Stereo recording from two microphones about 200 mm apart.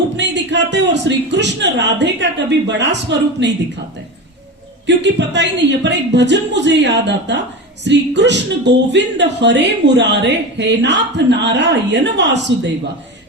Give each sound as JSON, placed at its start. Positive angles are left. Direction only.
{"t": 0.2, "sound": "a woman's voice", "side_deg": -60}
{"t": 4.9, "sound": "a woman's voice", "side_deg": -60}